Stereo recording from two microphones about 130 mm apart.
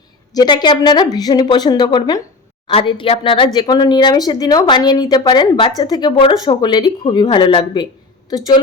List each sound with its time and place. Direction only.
0.3 s speech: 35° left (ahead or behind)